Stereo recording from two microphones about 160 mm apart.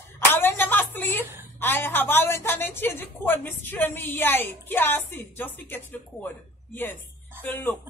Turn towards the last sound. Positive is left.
turn(degrees=10)  # may be behind; listen again after turning